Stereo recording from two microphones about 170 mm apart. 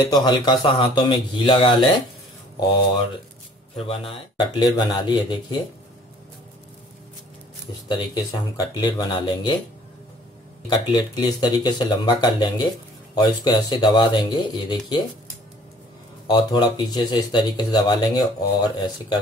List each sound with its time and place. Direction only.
0.1 s speech: 25° left (ahead or behind)
3.7 s speech: 35° left (ahead or behind)
8.1 s speech: 20° left (ahead or behind)
10.7 s speech: 25° left (ahead or behind)
16.3 s speech: 25° left (ahead or behind)